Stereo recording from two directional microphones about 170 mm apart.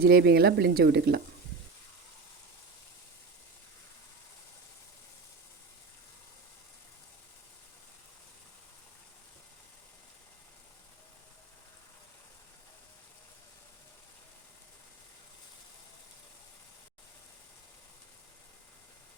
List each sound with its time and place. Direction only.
0.0 s speech: 70° right (ahead or behind)